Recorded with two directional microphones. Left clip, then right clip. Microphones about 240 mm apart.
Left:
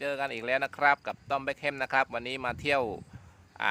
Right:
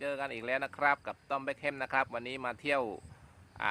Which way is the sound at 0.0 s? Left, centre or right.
Left.